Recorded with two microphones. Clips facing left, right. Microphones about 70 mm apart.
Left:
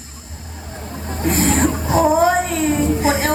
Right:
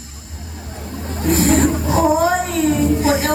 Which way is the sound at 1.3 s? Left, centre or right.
Left.